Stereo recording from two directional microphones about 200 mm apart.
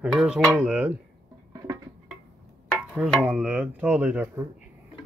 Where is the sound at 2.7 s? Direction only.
5° right (ahead or behind).